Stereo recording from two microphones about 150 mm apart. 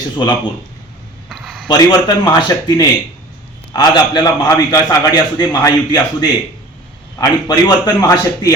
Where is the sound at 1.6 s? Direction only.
25° left (ahead or behind).